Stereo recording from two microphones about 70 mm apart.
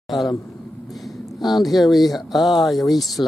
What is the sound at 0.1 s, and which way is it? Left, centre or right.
Speech, centre.